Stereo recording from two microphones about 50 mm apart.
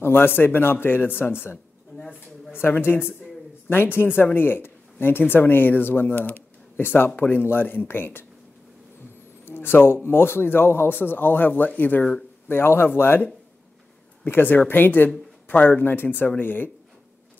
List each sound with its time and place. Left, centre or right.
0.0 s a woman's voice: left
9.5 s a man's voice: left
12.4 s a man's voice: left